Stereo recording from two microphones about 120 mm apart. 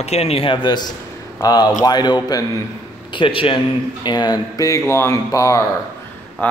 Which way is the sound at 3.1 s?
45° left (ahead or behind).